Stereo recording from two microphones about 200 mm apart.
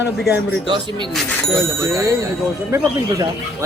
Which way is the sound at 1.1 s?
Centre (ahead or behind).